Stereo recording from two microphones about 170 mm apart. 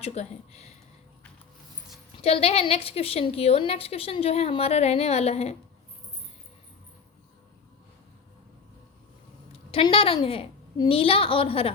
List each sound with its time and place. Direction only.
0.0 s a sound: 40° left (ahead or behind)
2.2 s a woman's voice: 35° left (ahead or behind)
9.5 s a woman's voice: 35° left (ahead or behind)